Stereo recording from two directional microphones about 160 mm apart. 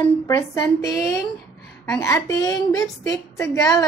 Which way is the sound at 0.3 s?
20° left (ahead or behind).